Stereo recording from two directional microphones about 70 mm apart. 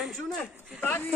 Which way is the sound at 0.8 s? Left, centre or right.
Left.